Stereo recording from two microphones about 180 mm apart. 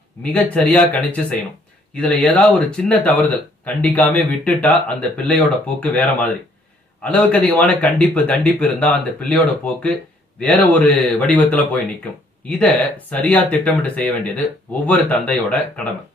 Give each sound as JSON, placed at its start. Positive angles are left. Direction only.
{"t": 0.2, "sound": "speech", "side_deg": 5}